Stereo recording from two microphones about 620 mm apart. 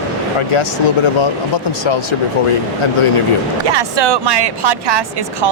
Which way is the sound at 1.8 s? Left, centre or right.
Left.